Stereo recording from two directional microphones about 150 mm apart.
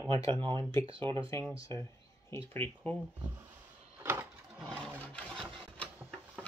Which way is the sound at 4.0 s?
15° right (ahead or behind).